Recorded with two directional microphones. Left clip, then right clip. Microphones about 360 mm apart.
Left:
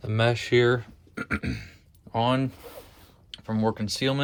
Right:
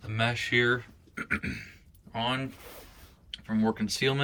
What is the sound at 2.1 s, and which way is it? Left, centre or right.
Speech, centre.